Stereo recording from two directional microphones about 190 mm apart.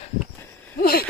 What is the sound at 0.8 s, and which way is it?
Hoot, 55° left (ahead or behind).